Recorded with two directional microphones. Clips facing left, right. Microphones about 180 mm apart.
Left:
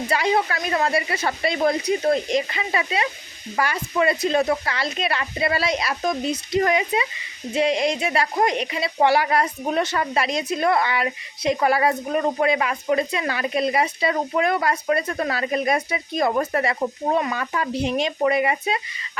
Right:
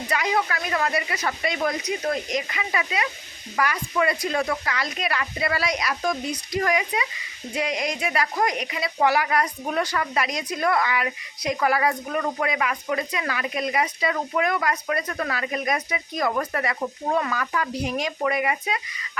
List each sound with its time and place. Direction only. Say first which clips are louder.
0.1 s a woman's voice: left 3 dB; 30° left (ahead or behind)